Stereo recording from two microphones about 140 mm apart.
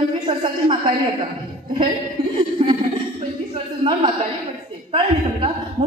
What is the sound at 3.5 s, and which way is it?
A woman's voice, 35° right (ahead or behind).